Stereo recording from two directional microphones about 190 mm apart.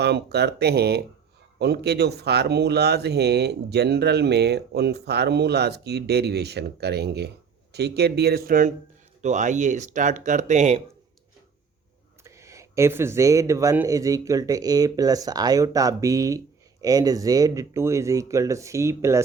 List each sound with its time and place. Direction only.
0.0 s speech: 60° right (ahead or behind); by 10.8 s 35° right (ahead or behind)
12.2 s speech: 15° right (ahead or behind)